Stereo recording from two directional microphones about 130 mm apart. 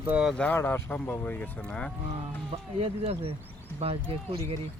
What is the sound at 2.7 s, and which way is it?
Speech, 50° right (ahead or behind).